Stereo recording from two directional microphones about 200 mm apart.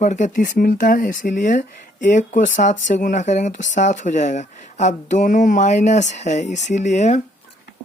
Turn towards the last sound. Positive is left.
turn(degrees=35)  # may be behind; listen again after turning